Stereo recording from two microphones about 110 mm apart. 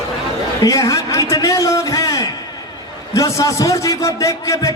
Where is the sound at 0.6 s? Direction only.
30° left (ahead or behind).